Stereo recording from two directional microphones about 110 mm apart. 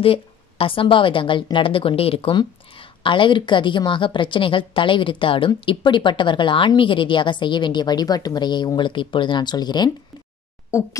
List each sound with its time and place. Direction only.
0.0 s a woman's voice: 55° left (ahead or behind); by 9.8 s 40° left (ahead or behind)
10.7 s speech: 25° left (ahead or behind)